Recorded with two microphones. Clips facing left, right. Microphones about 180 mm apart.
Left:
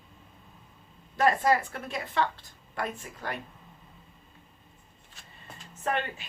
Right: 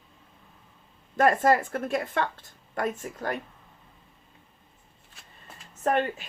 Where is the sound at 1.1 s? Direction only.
50° right (ahead or behind).